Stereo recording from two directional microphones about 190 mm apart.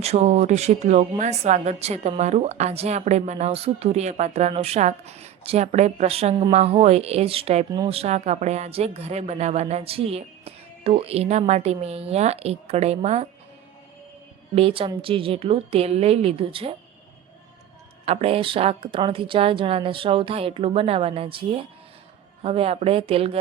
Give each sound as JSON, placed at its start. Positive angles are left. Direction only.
{"t": 0.0, "sound": "a woman's voice", "side_deg": -35}
{"t": 14.5, "sound": "a woman's voice", "side_deg": -30}
{"t": 18.0, "sound": "a woman's voice", "side_deg": -30}